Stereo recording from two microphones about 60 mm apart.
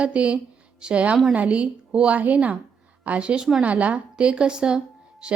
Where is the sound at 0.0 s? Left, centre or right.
Centre.